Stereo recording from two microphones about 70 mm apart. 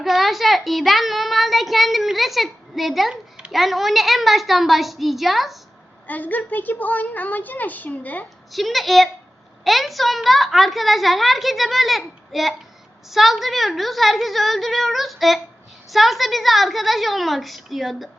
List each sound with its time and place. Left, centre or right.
0.0 s a child's voice: centre
6.1 s a woman's voice: left
8.5 s a child's voice: centre